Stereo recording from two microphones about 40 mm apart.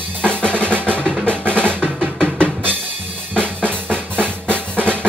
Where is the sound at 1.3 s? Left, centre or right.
Right.